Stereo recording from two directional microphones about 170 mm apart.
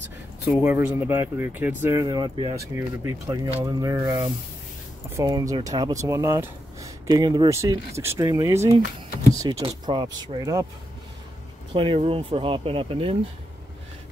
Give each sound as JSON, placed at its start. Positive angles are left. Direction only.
{"t": 0.5, "sound": "speech", "side_deg": -15}
{"t": 2.7, "sound": "speech", "side_deg": -15}
{"t": 11.7, "sound": "speech", "side_deg": -30}